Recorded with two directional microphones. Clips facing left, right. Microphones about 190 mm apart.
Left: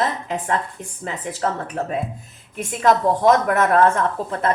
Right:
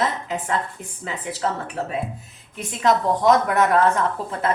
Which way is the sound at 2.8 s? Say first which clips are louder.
Left 2 dB; 45° left (ahead or behind).